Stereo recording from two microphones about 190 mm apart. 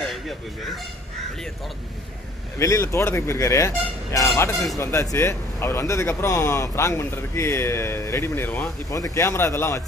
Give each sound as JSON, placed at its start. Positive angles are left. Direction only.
{"t": 2.6, "sound": "speech", "side_deg": 15}